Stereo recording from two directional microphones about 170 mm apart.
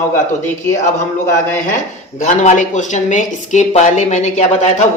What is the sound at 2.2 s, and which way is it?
Speech, 45° left (ahead or behind).